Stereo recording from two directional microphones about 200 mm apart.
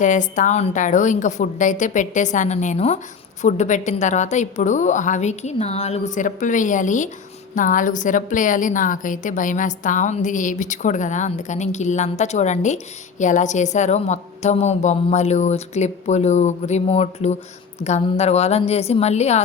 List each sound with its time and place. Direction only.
0.0 s a woman's voice: 40° left (ahead or behind)